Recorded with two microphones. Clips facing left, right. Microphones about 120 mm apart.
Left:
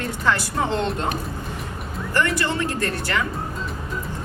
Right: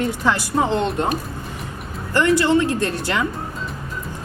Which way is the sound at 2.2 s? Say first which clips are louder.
Right 8 dB; 20° right (ahead or behind).